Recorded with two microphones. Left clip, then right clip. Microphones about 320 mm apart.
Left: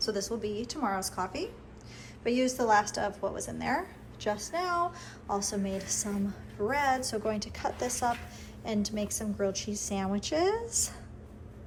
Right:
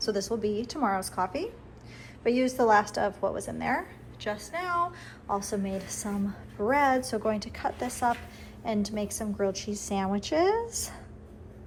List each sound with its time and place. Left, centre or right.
0.0 s a woman's voice: centre